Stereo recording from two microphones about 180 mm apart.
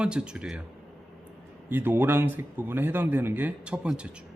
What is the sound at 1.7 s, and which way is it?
Speech, 10° right (ahead or behind).